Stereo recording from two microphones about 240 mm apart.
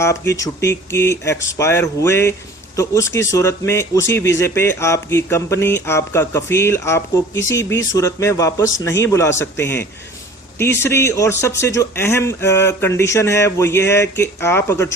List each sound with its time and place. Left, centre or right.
0.0 s speech: centre